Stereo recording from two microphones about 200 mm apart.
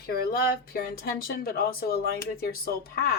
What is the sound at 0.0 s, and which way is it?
Speech, 50° left (ahead or behind).